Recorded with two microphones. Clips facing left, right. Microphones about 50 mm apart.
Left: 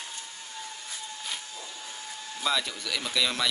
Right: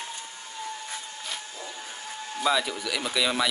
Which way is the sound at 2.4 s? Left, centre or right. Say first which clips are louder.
Right 4 dB; centre.